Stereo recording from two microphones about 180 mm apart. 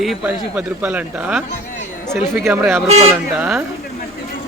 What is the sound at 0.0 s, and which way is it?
A man's voice, 5° right (ahead or behind).